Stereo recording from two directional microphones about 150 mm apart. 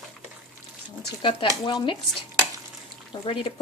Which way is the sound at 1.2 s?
35° left (ahead or behind).